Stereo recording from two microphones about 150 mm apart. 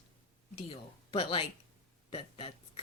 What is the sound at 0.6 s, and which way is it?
Speech, 40° left (ahead or behind).